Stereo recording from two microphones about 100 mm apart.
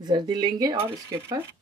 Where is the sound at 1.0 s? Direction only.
25° right (ahead or behind).